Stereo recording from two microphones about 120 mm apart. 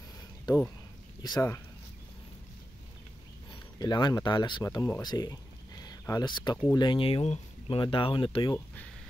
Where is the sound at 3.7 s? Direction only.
35° left (ahead or behind).